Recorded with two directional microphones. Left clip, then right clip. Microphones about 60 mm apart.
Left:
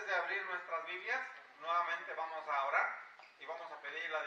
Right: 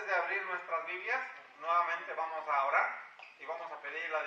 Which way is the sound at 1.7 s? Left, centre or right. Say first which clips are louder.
Right 4 dB; centre.